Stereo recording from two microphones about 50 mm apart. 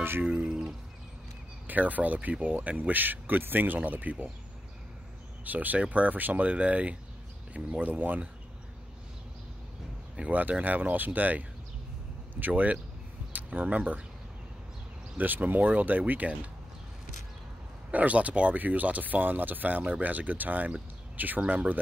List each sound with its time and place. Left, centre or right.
0.2 s speech: right
1.7 s speech: right
5.4 s speech: right
10.1 s speech: right
15.1 s speech: right
17.9 s speech: right